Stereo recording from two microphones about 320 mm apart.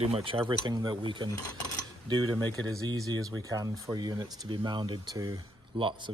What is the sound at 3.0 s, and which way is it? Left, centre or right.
Speech, centre.